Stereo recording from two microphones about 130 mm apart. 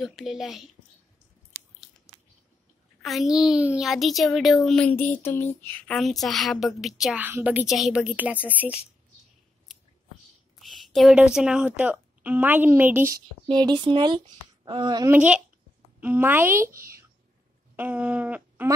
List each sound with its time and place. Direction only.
0.0 s a woman's voice: centre (ahead or behind)
1.5 s biting: 25° right (ahead or behind)
3.0 s a woman's voice: centre (ahead or behind)
7.6 s a woman's voice: centre (ahead or behind)
10.6 s a sound: centre (ahead or behind)
11.1 s a woman's voice: 5° right (ahead or behind)
13.5 s speech: 35° right (ahead or behind)
15.0 s a woman's voice: 10° right (ahead or behind)
16.6 s speech: 90° right
17.7 s speech: 10° right (ahead or behind)